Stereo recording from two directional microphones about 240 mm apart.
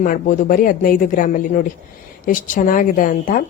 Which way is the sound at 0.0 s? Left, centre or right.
Left.